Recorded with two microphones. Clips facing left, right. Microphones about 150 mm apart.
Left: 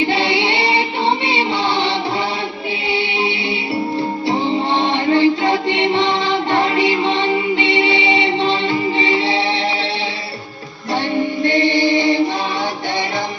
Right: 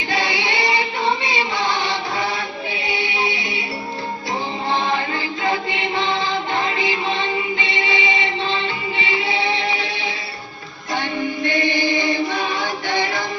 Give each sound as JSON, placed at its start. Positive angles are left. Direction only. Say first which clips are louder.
{"t": 0.1, "sound": "child singing", "louder": "left 5 dB", "side_deg": 30}
{"t": 1.3, "sound": "music", "louder": "left 4 dB", "side_deg": 30}
{"t": 4.9, "sound": "music", "louder": "left 9 dB", "side_deg": 30}
{"t": 11.4, "sound": "chant", "louder": "left 5 dB", "side_deg": 30}